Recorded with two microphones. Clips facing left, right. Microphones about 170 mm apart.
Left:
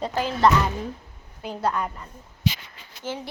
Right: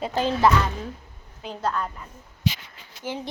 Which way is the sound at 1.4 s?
10° left (ahead or behind).